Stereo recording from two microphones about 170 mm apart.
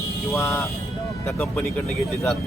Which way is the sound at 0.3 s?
15° left (ahead or behind).